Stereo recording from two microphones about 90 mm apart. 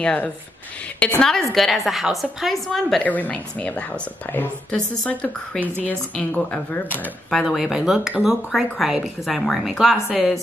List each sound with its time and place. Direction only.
0.0 s a woman's voice: 10° left (ahead or behind)
3.0 s a woman's voice: 15° left (ahead or behind)
7.2 s a woman's voice: centre (ahead or behind)